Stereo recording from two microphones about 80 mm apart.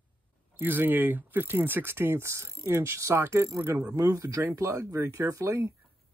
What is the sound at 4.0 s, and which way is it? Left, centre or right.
Speech, right.